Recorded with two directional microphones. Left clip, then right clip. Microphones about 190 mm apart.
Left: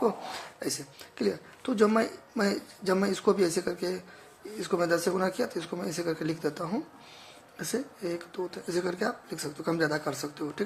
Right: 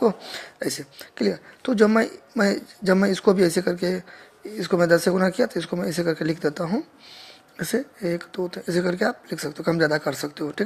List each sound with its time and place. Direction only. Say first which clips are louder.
0.0 s speech: right 6 dB; 30° right (ahead or behind)